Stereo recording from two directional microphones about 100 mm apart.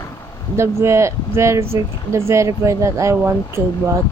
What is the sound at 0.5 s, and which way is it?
Speech, 30° right (ahead or behind).